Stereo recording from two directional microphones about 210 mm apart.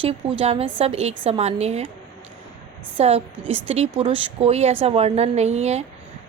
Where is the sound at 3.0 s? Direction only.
30° right (ahead or behind).